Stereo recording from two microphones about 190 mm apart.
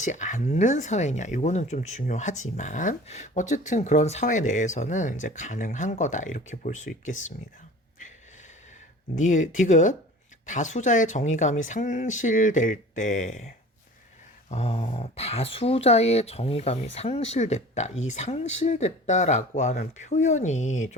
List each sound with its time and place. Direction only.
0.0 s speech: 40° left (ahead or behind)
9.1 s speech: 40° left (ahead or behind)
14.5 s speech: 30° left (ahead or behind)